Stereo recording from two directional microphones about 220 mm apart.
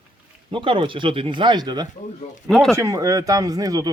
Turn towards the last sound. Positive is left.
turn(degrees=-15)  # may be behind; listen again after turning